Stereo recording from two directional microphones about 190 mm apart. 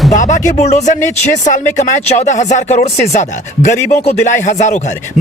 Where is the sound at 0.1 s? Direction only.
40° left (ahead or behind).